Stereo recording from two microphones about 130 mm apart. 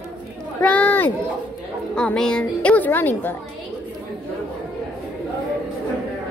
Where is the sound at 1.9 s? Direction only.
5° left (ahead or behind).